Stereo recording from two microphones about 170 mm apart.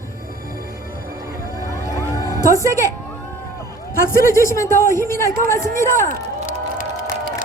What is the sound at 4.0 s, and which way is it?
Speech, 55° left (ahead or behind).